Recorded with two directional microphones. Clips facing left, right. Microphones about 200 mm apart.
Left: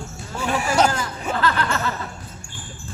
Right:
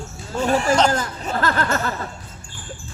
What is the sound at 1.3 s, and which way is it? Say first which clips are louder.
Speech: right 2 dB; 45° right (ahead or behind).